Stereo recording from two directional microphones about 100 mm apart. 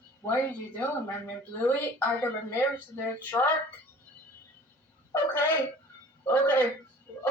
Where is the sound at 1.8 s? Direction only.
20° left (ahead or behind).